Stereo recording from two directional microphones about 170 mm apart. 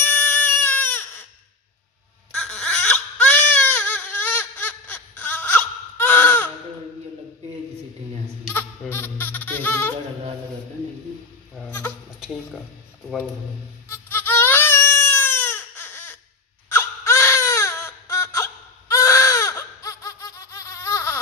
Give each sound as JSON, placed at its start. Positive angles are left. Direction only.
{"t": 0.0, "sound": "baby cry", "side_deg": 10}
{"t": 2.3, "sound": "baby cry", "side_deg": 5}
{"t": 8.5, "sound": "music", "side_deg": 10}
{"t": 11.5, "sound": "goat", "side_deg": 10}
{"t": 13.8, "sound": "a sound", "side_deg": 10}
{"t": 16.7, "sound": "baby cry", "side_deg": 15}